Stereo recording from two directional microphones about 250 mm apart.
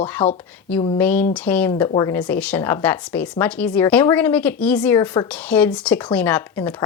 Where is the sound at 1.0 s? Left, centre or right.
Centre.